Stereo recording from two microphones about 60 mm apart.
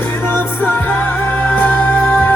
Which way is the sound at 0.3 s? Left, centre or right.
Left.